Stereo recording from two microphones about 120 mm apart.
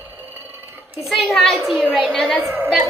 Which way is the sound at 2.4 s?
20° right (ahead or behind).